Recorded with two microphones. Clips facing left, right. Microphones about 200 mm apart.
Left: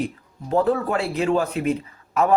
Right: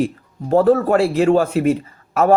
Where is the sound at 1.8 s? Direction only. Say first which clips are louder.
Right 4 dB; 45° right (ahead or behind).